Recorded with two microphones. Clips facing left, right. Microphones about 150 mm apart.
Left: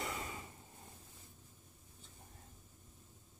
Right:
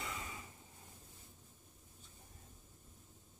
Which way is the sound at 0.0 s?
35° left (ahead or behind).